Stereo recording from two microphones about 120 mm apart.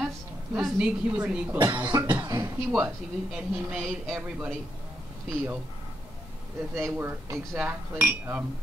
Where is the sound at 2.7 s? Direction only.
10° right (ahead or behind).